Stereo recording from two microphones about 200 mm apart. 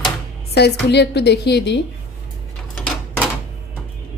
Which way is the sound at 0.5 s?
55° left (ahead or behind).